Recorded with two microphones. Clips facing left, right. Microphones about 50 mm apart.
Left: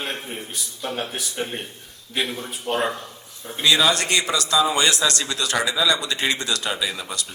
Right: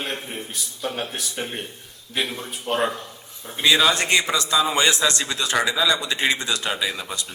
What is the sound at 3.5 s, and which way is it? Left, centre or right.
A man's voice, centre.